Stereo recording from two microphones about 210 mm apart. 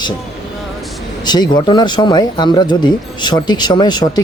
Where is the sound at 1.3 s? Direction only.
20° left (ahead or behind).